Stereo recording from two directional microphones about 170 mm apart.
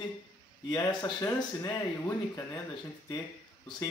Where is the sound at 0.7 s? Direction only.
20° left (ahead or behind).